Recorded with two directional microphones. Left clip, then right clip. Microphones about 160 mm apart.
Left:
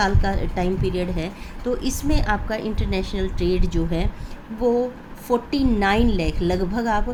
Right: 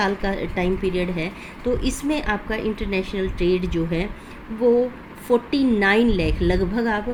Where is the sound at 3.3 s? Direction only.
55° left (ahead or behind).